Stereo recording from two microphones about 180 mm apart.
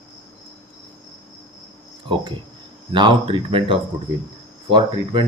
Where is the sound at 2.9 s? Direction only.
25° right (ahead or behind).